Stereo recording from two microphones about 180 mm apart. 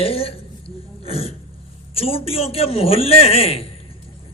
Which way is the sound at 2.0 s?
30° left (ahead or behind).